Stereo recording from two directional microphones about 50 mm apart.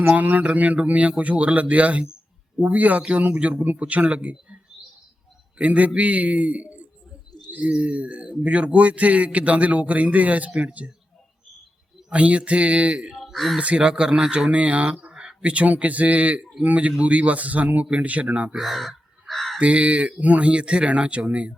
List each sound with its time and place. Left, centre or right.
0.0 s speech: right
12.1 s speech: right
13.3 s speech: centre
13.6 s speech: right
18.5 s speech: centre
19.3 s honk: centre
19.5 s speech: right